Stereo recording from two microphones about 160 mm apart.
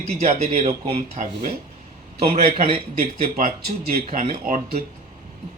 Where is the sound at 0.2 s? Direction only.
45° right (ahead or behind).